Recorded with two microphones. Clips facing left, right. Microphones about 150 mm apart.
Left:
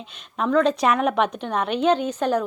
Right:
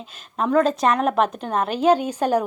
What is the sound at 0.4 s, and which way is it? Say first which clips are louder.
A woman's voice: right 1 dB; 5° right (ahead or behind).